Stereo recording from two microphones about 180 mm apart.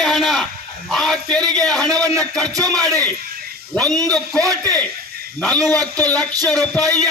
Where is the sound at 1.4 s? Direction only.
20° right (ahead or behind).